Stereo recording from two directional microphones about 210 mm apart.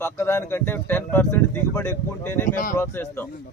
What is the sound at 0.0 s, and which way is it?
Speech, 10° left (ahead or behind).